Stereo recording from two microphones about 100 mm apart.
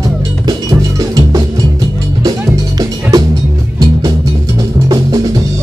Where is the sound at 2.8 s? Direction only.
35° right (ahead or behind).